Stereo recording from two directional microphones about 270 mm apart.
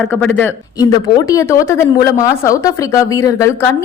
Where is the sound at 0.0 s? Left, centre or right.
Centre.